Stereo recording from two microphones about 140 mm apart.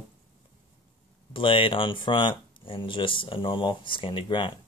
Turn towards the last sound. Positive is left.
turn(degrees=35)  # may be behind; listen again after turning